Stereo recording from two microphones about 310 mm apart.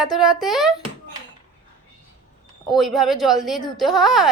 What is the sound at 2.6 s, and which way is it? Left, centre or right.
Speech, centre.